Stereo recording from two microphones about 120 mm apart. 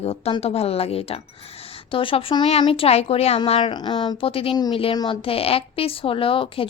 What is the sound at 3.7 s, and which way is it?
A woman's voice, 40° left (ahead or behind).